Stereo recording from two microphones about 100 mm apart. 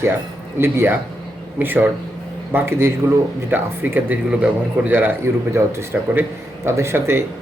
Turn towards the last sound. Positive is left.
turn(degrees=-25)  # may be behind; listen again after turning